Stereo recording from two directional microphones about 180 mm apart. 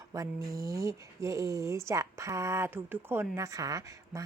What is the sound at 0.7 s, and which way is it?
Speech, 15° right (ahead or behind).